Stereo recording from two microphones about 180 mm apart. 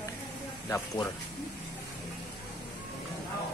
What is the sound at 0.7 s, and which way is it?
Speech, 15° left (ahead or behind).